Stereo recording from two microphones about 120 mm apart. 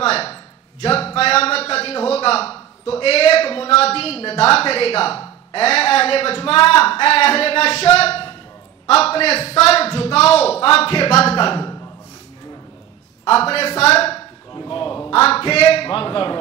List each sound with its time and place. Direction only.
0.0 s a sound: 55° left (ahead or behind)
4.5 s a man's voice: 55° left (ahead or behind)
13.3 s a man's voice: 55° left (ahead or behind)
14.7 s crow: 45° left (ahead or behind)
15.0 s a man's voice: 55° left (ahead or behind)